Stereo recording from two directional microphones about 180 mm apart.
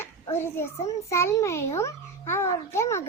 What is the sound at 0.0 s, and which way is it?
A child's voice, 15° left (ahead or behind).